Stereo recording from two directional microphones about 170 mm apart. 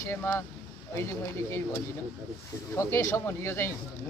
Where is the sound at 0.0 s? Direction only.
15° left (ahead or behind).